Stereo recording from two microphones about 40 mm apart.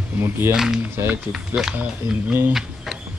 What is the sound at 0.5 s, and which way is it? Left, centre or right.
Speech, centre.